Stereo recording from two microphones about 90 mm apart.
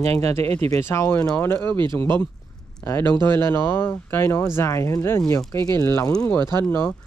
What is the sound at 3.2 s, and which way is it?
Speech, 25° left (ahead or behind).